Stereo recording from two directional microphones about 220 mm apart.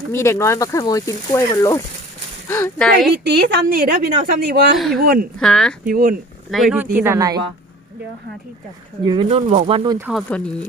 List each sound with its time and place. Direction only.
0.1 s speech: 10° left (ahead or behind)
3.2 s a woman's voice: 45° right (ahead or behind)
5.4 s speech: 5° left (ahead or behind)
5.8 s speech: 40° right (ahead or behind)
6.5 s speech: centre (ahead or behind)
6.9 s speech: 10° right (ahead or behind)
9.0 s speech: 25° right (ahead or behind)
10.1 s speech: centre (ahead or behind)